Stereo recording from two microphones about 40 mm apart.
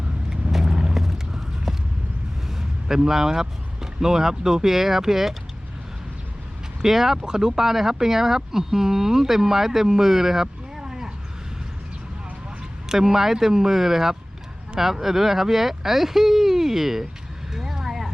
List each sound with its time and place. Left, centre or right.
0.3 s vehicle: centre
0.9 s a sound: centre
2.9 s speech: centre
6.8 s speech: centre
12.9 s speech: centre
17.5 s a sound: centre